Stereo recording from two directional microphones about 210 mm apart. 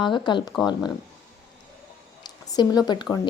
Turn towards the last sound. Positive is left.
turn(degrees=20)  # may be behind; listen again after turning